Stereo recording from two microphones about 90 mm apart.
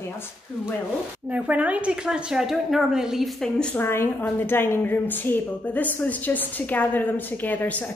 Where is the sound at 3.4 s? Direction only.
10° left (ahead or behind).